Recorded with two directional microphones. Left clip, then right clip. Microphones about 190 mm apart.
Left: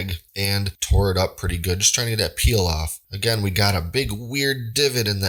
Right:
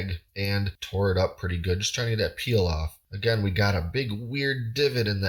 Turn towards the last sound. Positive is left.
turn(degrees=35)  # may be behind; listen again after turning